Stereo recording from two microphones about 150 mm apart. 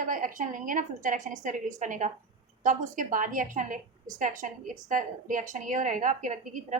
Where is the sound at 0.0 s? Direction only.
65° right (ahead or behind).